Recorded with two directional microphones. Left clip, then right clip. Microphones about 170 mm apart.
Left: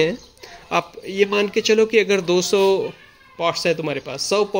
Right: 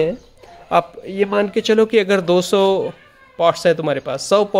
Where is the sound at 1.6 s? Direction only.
30° right (ahead or behind).